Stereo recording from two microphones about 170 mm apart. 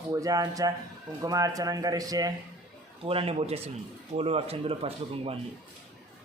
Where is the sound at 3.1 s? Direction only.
35° right (ahead or behind).